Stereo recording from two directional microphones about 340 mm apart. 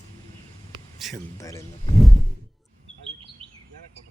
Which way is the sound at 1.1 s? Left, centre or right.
Centre.